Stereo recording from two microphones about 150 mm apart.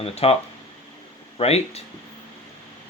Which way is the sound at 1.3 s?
45° left (ahead or behind).